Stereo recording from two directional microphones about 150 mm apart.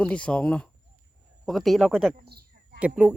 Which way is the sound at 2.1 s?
90° right.